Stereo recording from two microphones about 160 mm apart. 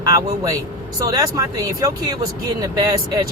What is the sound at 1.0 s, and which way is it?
Speech, 20° right (ahead or behind).